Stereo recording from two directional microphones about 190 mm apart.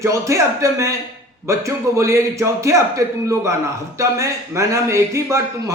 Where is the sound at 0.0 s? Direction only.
15° right (ahead or behind).